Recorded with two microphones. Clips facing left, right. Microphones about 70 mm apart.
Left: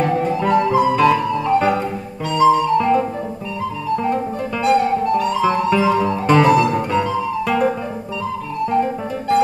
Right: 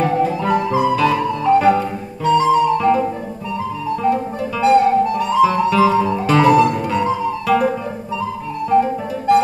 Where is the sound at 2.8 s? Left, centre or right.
Centre.